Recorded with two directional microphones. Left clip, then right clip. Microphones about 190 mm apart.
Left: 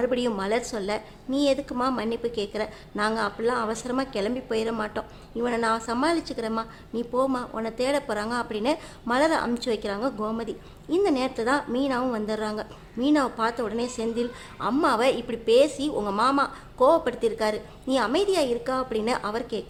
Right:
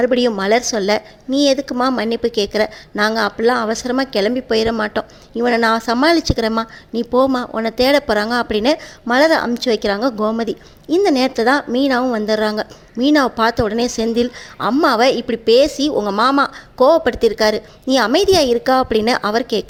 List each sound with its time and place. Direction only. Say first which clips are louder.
0.0 s a woman's voice: right 10 dB; 30° right (ahead or behind)